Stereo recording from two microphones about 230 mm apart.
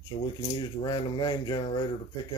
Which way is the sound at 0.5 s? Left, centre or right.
Centre.